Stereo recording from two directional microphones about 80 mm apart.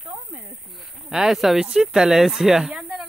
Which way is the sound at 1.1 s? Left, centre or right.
Centre.